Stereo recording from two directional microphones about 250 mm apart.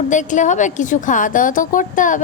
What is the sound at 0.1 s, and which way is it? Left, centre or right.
A woman's voice, left.